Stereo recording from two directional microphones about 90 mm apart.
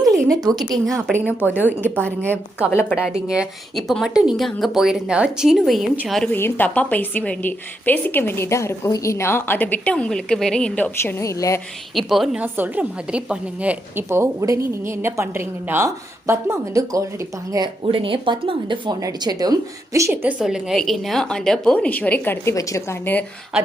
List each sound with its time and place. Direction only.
0.0 s a sound: 40° right (ahead or behind)
1.4 s a woman's voice: 20° left (ahead or behind)
2.7 s a woman's voice: 10° right (ahead or behind)
6.2 s a woman's voice: 20° left (ahead or behind)
11.0 s speech: 30° left (ahead or behind)
11.9 s a woman's voice: centre (ahead or behind)
12.4 s a woman's voice: 20° right (ahead or behind)
14.1 s a woman's voice: 35° right (ahead or behind)
17.6 s speech: 75° right (ahead or behind)
18.9 s a woman's voice: 45° right (ahead or behind)
20.4 s a woman's voice: 5° right (ahead or behind); by 22.5 s 20° left (ahead or behind)
22.5 s speech: 35° left (ahead or behind)